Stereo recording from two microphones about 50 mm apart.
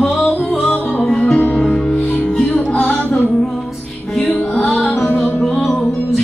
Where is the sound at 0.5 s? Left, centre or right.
Left.